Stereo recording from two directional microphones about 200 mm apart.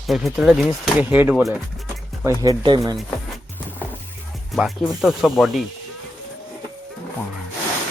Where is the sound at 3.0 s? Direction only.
5° left (ahead or behind).